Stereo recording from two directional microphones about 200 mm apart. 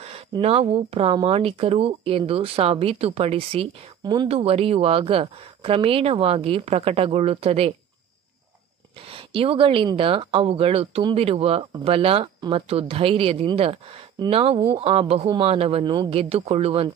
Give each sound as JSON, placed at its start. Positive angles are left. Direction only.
{"t": 0.0, "sound": "speech", "side_deg": -30}
{"t": 9.0, "sound": "speech", "side_deg": -30}